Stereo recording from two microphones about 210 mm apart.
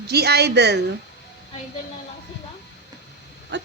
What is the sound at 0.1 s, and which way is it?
Speech, 50° right (ahead or behind).